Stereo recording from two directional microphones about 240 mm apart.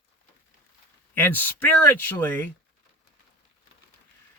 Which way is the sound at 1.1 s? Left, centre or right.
Centre.